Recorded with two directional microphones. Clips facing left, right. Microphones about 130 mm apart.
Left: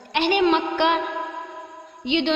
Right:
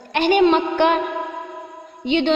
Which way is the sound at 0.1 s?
45° right (ahead or behind).